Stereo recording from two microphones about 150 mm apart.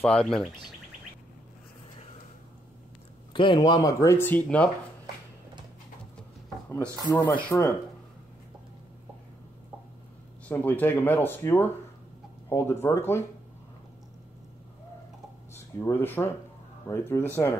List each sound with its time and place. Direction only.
0.0 s speech: 5° left (ahead or behind)
3.3 s speech: 30° left (ahead or behind); by 4.6 s 10° left (ahead or behind)
7.1 s speech: 10° left (ahead or behind)
10.5 s speech: 10° left (ahead or behind)
15.5 s speech: 15° left (ahead or behind)